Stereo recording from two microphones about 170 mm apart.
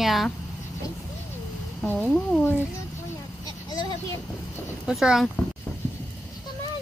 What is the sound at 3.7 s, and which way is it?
Vehicle, 25° left (ahead or behind).